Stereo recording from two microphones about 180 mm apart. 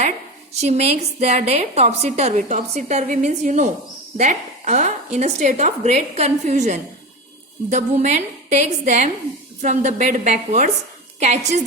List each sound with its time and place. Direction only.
0.5 s a woman's voice: 35° right (ahead or behind)